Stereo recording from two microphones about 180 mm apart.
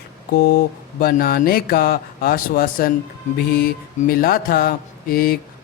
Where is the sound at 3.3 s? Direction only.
55° left (ahead or behind).